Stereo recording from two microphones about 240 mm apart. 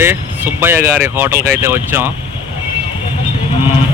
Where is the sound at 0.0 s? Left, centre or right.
Centre.